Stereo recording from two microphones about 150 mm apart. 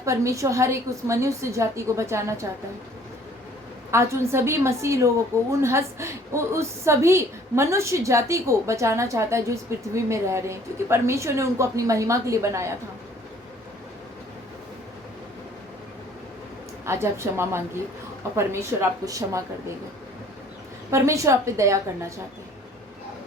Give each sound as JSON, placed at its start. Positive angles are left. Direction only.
{"t": 0.0, "sound": "a woman's voice", "side_deg": -20}
{"t": 3.9, "sound": "a woman's voice", "side_deg": -20}
{"t": 16.8, "sound": "a woman's voice", "side_deg": -15}
{"t": 20.9, "sound": "a woman's voice", "side_deg": -20}